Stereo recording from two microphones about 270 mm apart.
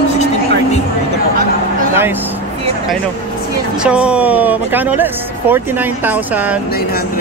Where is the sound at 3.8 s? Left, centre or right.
Centre.